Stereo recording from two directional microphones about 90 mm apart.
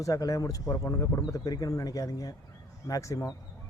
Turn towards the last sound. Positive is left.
turn(degrees=40)  # may be behind; listen again after turning